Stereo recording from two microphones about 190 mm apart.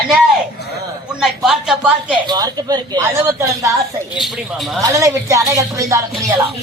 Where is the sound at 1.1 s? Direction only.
5° right (ahead or behind).